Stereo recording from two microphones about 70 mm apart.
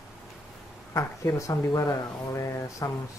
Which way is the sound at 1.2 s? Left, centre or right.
Left.